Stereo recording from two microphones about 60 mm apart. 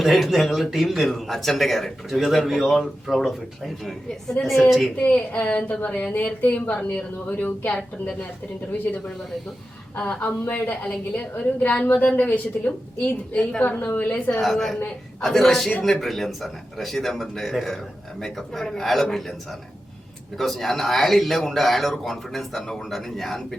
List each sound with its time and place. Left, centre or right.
0.0 s speech: centre
4.9 s a woman's voice: left
14.4 s speech: centre